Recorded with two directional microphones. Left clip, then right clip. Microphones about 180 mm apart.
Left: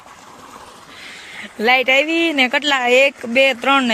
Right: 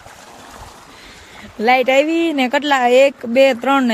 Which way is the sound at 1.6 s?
10° right (ahead or behind).